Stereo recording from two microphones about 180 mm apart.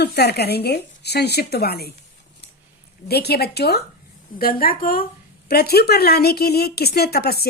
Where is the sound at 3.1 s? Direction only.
60° left (ahead or behind).